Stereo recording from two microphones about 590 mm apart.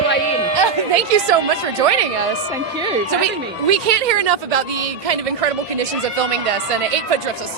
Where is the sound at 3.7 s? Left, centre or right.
Right.